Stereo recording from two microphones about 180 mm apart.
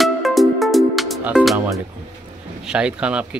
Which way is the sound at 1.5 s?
15° right (ahead or behind).